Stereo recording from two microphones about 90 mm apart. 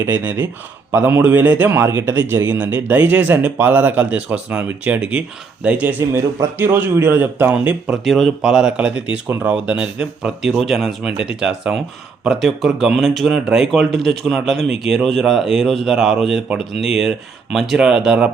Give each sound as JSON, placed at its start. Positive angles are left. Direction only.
{"t": 0.0, "sound": "a man's voice", "side_deg": -25}
{"t": 7.9, "sound": "speech", "side_deg": 0}